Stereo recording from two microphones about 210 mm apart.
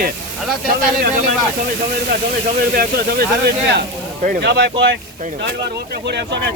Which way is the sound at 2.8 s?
50° right (ahead or behind).